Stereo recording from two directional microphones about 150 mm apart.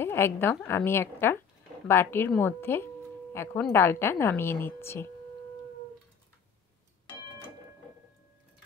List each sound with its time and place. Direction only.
0.0 s a woman's voice: 15° left (ahead or behind)